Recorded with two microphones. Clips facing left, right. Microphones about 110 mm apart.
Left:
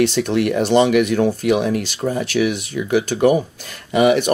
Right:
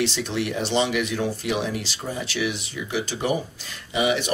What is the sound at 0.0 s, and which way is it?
Speech, 55° left (ahead or behind).